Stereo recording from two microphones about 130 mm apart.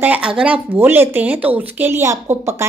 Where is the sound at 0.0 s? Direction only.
10° right (ahead or behind).